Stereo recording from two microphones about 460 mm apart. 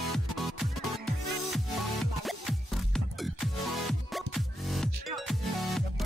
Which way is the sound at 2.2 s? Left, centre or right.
Centre.